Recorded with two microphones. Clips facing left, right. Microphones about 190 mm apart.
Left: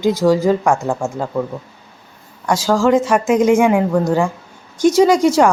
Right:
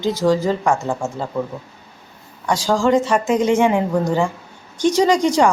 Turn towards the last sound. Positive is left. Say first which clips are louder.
# left 3 dB
turn(degrees=5)  # may be behind; listen again after turning